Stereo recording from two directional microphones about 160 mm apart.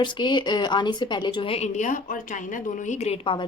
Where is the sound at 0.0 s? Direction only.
30° left (ahead or behind).